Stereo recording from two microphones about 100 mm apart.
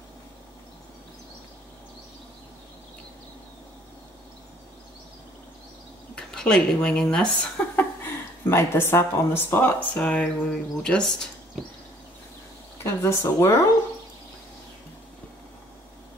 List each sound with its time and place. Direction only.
6.1 s speech: 5° left (ahead or behind)
7.7 s a sound: 20° left (ahead or behind)
9.9 s speech: 10° left (ahead or behind)
12.7 s speech: 25° left (ahead or behind)